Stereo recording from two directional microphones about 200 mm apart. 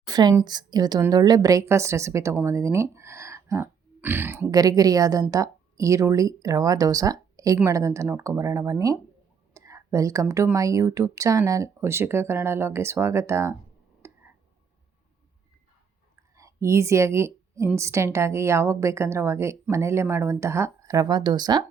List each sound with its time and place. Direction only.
0.0 s a woman's voice: 20° right (ahead or behind)
14.0 s a sound: 10° right (ahead or behind)
16.3 s a woman's voice: 15° right (ahead or behind)